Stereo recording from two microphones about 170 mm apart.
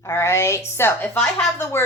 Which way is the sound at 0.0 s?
15° left (ahead or behind).